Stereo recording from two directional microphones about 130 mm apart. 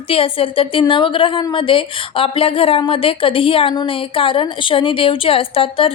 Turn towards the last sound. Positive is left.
turn(degrees=45)  # may be behind; listen again after turning